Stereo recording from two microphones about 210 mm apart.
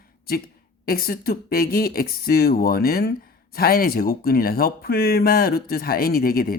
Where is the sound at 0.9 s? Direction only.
45° left (ahead or behind).